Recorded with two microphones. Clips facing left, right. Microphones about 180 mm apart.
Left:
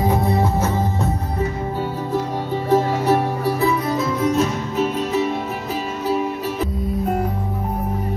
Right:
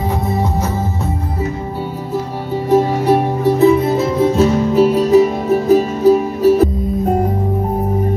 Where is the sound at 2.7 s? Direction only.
15° right (ahead or behind); by 6.7 s 40° right (ahead or behind).